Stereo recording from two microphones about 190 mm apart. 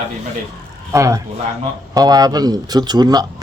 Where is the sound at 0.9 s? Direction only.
15° right (ahead or behind).